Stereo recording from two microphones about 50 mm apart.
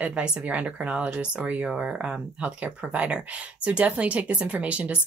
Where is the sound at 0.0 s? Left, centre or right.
Right.